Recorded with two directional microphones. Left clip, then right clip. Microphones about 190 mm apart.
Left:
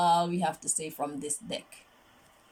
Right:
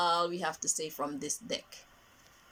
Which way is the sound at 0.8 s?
15° left (ahead or behind).